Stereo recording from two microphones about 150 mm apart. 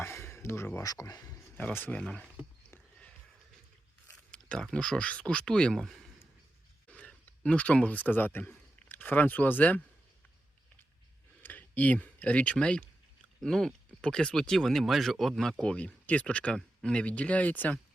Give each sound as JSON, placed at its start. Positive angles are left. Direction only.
{"t": 0.0, "sound": "speech", "side_deg": 15}
{"t": 1.7, "sound": "speech", "side_deg": 10}
{"t": 4.3, "sound": "speech", "side_deg": 5}
{"t": 11.4, "sound": "speech", "side_deg": 10}